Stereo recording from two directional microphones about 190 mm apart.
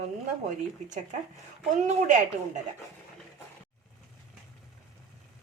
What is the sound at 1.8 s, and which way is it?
Speech, 40° right (ahead or behind).